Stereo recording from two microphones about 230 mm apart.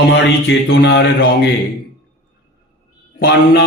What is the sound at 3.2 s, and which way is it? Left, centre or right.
Speech, left.